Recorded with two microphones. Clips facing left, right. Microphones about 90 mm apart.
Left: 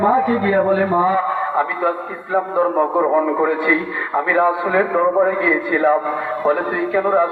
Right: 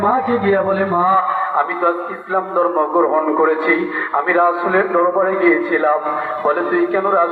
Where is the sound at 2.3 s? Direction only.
45° right (ahead or behind).